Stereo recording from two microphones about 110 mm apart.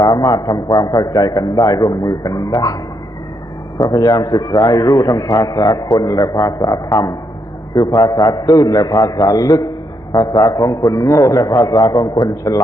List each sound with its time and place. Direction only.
0.0 s a man's voice: 35° left (ahead or behind)
3.8 s a man's voice: 35° left (ahead or behind)